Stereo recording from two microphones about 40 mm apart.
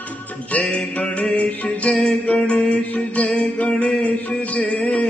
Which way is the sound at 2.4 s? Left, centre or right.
Left.